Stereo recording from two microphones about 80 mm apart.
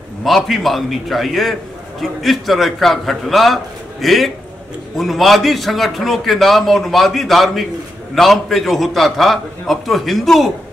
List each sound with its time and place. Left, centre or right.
0.2 s a man's voice: centre